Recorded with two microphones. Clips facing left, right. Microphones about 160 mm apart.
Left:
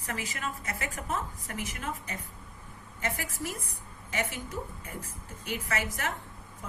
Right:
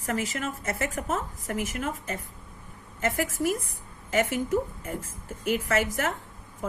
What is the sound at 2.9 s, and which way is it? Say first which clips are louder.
A woman's voice: right 8 dB; 45° right (ahead or behind).